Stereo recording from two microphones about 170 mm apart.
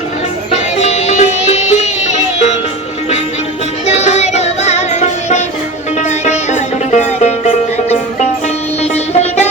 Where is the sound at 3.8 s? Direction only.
40° left (ahead or behind).